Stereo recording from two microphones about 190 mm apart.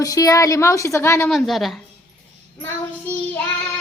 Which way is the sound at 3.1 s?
10° left (ahead or behind).